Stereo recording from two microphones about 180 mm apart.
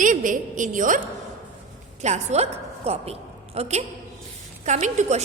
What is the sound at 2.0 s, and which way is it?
A woman's voice, 40° right (ahead or behind).